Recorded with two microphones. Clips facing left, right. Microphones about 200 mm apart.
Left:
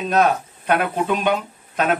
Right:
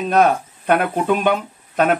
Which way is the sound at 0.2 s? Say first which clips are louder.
Right 3 dB; 50° right (ahead or behind).